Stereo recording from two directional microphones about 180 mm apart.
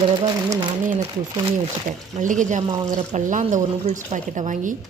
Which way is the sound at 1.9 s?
45° right (ahead or behind).